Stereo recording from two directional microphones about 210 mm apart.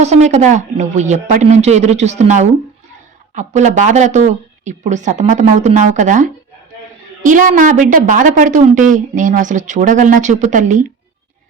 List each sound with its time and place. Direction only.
0.0 s a woman's voice: 35° right (ahead or behind)